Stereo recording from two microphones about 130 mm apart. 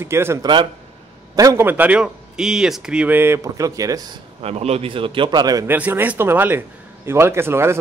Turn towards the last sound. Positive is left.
turn(degrees=-20)  # may be behind; listen again after turning